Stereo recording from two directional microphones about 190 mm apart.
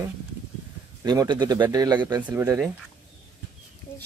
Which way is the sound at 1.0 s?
20° right (ahead or behind).